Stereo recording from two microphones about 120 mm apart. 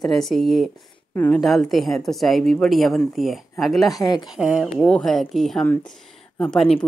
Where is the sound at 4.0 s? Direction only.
35° left (ahead or behind).